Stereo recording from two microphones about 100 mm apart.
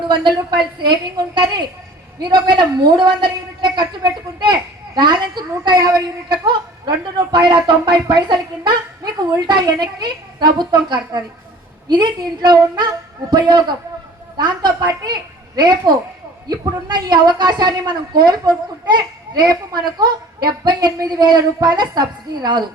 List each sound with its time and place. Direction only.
0.0 s a woman's voice: 55° right (ahead or behind)
8.0 s a woman's voice: 45° right (ahead or behind)